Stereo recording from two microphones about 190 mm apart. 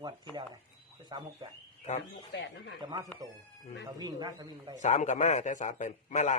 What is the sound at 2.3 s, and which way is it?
Speech, 70° left (ahead or behind).